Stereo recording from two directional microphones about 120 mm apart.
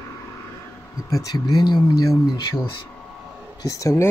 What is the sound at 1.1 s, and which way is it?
Speech, 30° left (ahead or behind).